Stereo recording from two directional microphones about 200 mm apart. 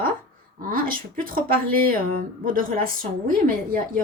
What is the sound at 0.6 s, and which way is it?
Speech, 45° right (ahead or behind).